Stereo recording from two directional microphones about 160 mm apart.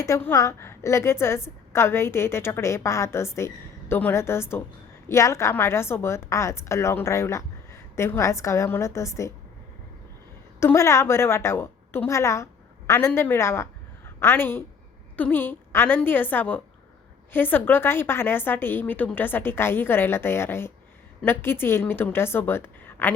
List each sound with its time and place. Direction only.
0.0 s a woman's voice: 15° left (ahead or behind)
10.6 s a woman's voice: 15° left (ahead or behind)